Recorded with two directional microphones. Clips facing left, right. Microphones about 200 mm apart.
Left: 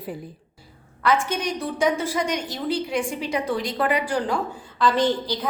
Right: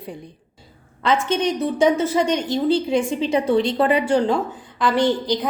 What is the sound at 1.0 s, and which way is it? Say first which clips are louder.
A woman's voice: right 3 dB; 25° right (ahead or behind).